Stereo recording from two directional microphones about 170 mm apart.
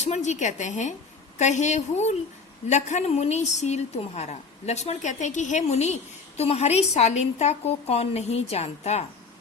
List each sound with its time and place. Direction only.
0.0 s a woman's voice: 45° left (ahead or behind)